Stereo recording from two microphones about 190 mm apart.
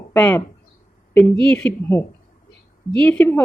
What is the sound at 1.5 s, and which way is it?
Speech, 5° left (ahead or behind).